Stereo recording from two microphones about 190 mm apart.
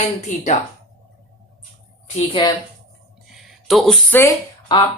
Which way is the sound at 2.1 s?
25° left (ahead or behind).